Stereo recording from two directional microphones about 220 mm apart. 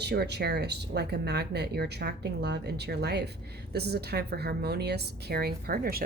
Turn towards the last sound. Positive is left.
turn(degrees=-45)  # may be behind; listen again after turning